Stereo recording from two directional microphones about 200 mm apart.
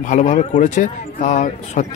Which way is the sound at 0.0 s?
40° left (ahead or behind).